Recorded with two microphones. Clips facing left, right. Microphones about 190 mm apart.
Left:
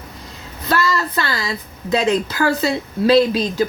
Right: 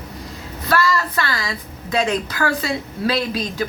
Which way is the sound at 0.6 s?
25° left (ahead or behind).